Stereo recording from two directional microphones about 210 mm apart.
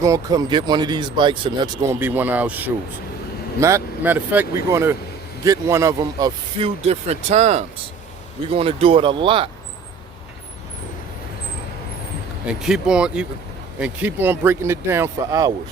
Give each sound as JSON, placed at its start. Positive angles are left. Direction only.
{"t": 0.0, "sound": "speech", "side_deg": -15}
{"t": 6.8, "sound": "speech", "side_deg": -30}
{"t": 12.5, "sound": "speech", "side_deg": -5}